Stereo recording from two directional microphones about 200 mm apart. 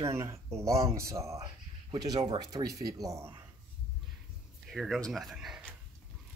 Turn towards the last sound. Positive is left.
turn(degrees=0)  # may be behind; listen again after turning